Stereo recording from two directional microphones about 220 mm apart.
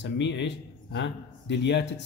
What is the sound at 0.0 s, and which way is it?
A man's voice, 55° left (ahead or behind).